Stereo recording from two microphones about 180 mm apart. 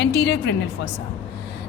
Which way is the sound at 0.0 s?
70° left (ahead or behind).